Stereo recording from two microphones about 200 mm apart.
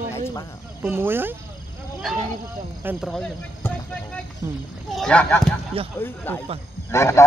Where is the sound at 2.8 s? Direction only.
Centre (ahead or behind).